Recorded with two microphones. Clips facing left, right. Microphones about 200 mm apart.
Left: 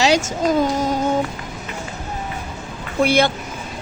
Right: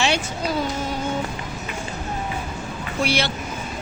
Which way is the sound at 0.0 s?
40° left (ahead or behind).